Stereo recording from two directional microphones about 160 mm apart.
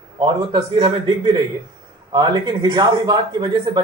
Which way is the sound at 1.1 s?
25° right (ahead or behind).